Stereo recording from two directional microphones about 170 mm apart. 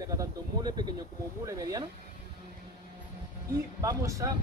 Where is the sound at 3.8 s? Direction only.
20° right (ahead or behind).